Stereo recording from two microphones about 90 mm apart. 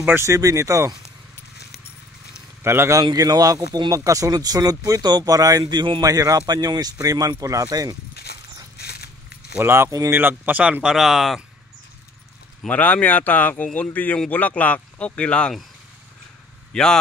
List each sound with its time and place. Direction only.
0.0 s a man's voice: 25° right (ahead or behind)
0.3 s speech: 35° right (ahead or behind)
2.6 s a man's voice: 30° right (ahead or behind)
3.0 s speech: 45° right (ahead or behind)
9.6 s speech: 30° right (ahead or behind)
10.1 s speech: 20° right (ahead or behind); by 11.4 s centre (ahead or behind)
12.6 s speech: 15° left (ahead or behind)
16.7 s speech: 10° left (ahead or behind)